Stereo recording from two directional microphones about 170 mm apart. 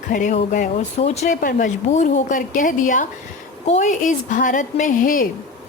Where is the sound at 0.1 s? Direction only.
50° left (ahead or behind).